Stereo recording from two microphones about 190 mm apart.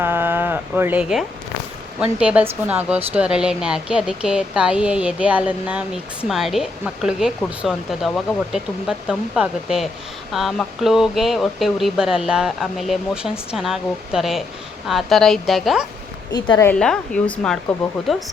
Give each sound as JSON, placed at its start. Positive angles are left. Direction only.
{"t": 0.0, "sound": "a sound", "side_deg": -10}
{"t": 2.0, "sound": "speech", "side_deg": -5}
{"t": 16.3, "sound": "a woman's voice", "side_deg": 20}
{"t": 16.7, "sound": "speech", "side_deg": 5}